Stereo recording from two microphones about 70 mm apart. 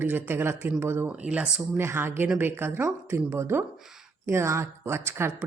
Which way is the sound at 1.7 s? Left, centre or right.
Right.